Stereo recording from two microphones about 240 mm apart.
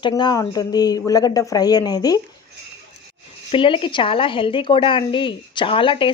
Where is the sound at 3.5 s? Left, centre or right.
Left.